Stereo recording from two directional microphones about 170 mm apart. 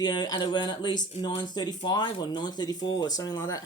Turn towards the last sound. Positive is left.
turn(degrees=20)  # may be behind; listen again after turning